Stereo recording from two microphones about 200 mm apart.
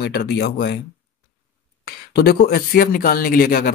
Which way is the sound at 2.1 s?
50° left (ahead or behind).